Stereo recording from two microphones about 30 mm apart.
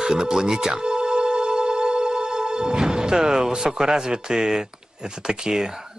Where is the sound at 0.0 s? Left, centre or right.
Centre.